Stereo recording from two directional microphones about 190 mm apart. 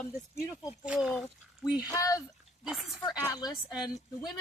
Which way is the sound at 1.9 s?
15° left (ahead or behind).